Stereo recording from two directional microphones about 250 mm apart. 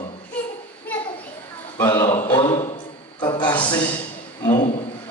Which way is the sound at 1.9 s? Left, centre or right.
Left.